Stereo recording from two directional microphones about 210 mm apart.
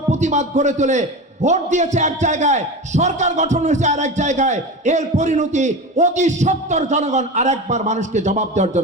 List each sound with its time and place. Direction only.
0.1 s a man's voice: 35° right (ahead or behind)